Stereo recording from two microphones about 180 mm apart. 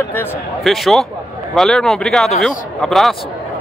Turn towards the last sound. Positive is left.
turn(degrees=0)  # may be behind; listen again after turning